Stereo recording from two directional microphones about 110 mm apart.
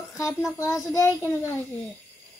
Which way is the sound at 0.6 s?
30° left (ahead or behind).